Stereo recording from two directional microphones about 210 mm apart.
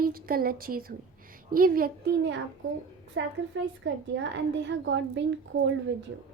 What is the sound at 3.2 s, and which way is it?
A woman's voice, 60° right (ahead or behind).